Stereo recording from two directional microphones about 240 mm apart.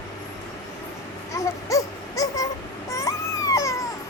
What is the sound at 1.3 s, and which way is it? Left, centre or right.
Baby cry, centre.